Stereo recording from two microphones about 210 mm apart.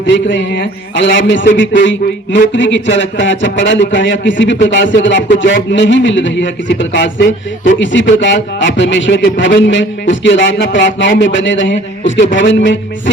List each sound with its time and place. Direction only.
0.0 s a man's voice: 60° left (ahead or behind)